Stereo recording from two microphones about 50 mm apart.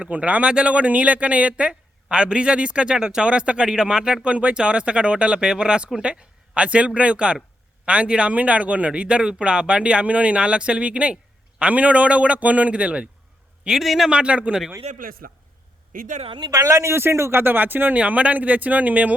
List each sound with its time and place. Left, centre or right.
0.0 s speech: right
13.7 s a man's voice: centre
14.1 s speech: right
16.6 s a man's voice: right
16.9 s a man's voice: right
17.4 s speech: right
17.9 s speech: right